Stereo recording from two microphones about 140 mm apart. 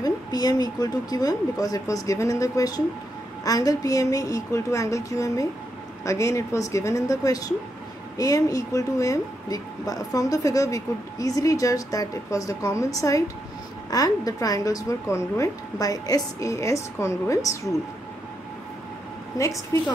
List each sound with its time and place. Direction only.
0.0 s a woman's voice: 30° left (ahead or behind)
19.3 s a woman's voice: 20° left (ahead or behind)